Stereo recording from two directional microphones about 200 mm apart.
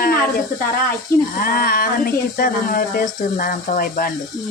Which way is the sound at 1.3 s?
45° left (ahead or behind).